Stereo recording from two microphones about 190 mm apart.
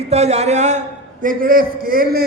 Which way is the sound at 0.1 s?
35° right (ahead or behind).